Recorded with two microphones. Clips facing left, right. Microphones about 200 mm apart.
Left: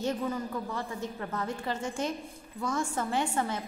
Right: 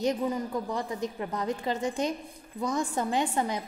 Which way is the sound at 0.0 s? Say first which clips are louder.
Right 3 dB; 15° right (ahead or behind).